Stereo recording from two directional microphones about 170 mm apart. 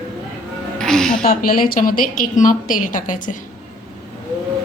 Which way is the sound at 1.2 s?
55° left (ahead or behind).